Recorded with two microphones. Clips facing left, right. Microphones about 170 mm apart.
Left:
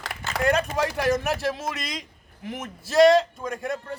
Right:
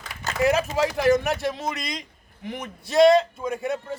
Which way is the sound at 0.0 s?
75° left (ahead or behind).